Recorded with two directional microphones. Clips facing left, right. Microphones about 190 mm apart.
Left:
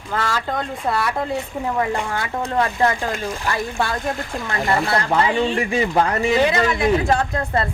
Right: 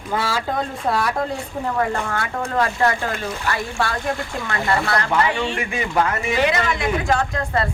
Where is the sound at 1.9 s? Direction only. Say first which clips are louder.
Left 1 dB; 20° left (ahead or behind).